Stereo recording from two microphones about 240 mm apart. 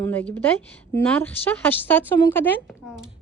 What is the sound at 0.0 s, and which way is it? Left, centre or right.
A woman's voice, centre.